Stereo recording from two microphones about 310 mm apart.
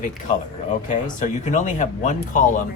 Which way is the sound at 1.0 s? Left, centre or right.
Left.